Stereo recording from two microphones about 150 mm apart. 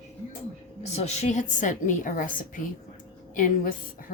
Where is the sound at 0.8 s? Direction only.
45° left (ahead or behind).